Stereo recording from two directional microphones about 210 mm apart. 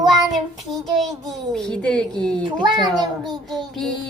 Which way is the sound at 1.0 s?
Centre (ahead or behind).